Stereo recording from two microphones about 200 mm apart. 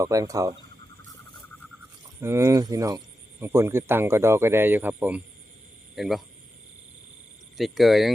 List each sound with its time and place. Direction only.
0.0 s speech: 15° right (ahead or behind)
2.2 s speech: 15° right (ahead or behind)
7.5 s speech: centre (ahead or behind)